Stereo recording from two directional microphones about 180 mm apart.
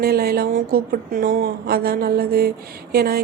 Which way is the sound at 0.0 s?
60° right (ahead or behind).